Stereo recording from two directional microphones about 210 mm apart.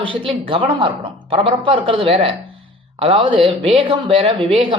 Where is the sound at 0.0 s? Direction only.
25° right (ahead or behind).